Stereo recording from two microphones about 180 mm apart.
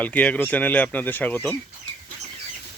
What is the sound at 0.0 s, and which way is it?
Speech, 10° left (ahead or behind).